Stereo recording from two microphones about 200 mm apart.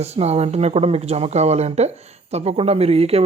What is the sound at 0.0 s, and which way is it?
Speech, 30° right (ahead or behind).